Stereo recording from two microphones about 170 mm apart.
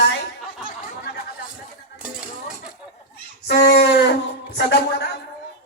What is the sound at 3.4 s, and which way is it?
Speech, 75° left (ahead or behind).